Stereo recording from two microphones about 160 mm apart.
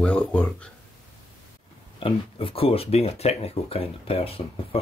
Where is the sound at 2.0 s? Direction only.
35° left (ahead or behind).